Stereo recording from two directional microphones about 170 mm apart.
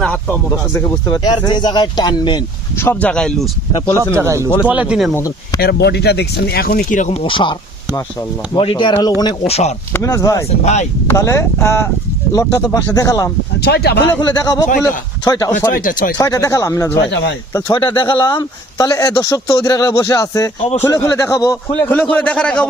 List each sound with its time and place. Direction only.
0.0 s speech: 5° left (ahead or behind); by 2.4 s 25° left (ahead or behind)
2.7 s speech: 10° left (ahead or behind)
3.9 s speech: 15° right (ahead or behind)
5.1 s speech: 20° left (ahead or behind)
5.5 s speech: 70° left (ahead or behind); by 7.5 s 30° left (ahead or behind)
8.5 s speech: 30° left (ahead or behind)
9.5 s speech: 40° left (ahead or behind)
9.9 s a man's voice: 20° left (ahead or behind)
13.6 s speech: 75° left (ahead or behind)
14.2 s speech: 25° left (ahead or behind)
15.7 s speech: 50° left (ahead or behind)
16.1 s a man's voice: 20° left (ahead or behind)